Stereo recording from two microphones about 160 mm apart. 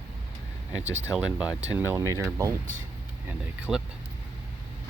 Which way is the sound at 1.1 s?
5° right (ahead or behind).